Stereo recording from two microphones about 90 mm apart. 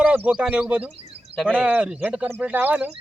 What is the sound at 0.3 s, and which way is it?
Speech, 10° right (ahead or behind).